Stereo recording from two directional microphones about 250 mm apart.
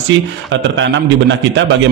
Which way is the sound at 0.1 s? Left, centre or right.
Right.